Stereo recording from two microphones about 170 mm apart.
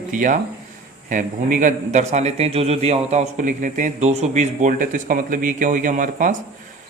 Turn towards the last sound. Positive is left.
turn(degrees=-50)  # may be behind; listen again after turning